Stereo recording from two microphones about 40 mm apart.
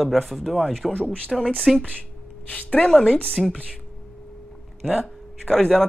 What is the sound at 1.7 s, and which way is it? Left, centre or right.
Speech, centre.